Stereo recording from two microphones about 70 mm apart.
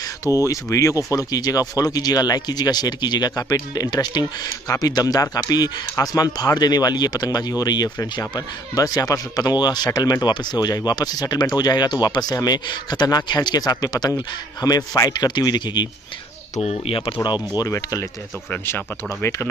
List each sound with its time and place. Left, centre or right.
0.2 s speech: left
1.1 s speech: left
5.9 s speech: left
8.0 s speech: left
9.9 s speech: left
15.1 s speech: left
17.6 s speech: left